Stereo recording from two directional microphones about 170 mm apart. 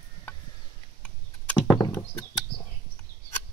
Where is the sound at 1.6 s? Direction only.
25° left (ahead or behind).